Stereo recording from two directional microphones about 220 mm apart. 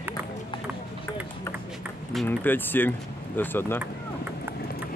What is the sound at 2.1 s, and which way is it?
Speech, 5° left (ahead or behind).